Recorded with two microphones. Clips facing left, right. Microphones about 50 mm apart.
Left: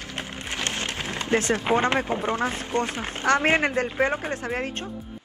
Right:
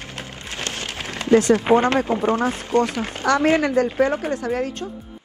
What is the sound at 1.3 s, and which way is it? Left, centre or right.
Speech, left.